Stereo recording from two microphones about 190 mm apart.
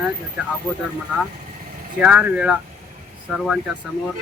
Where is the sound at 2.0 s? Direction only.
5° right (ahead or behind).